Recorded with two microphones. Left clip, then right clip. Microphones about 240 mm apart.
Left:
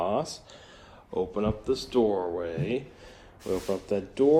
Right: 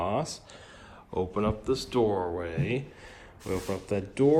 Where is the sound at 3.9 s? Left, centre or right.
Centre.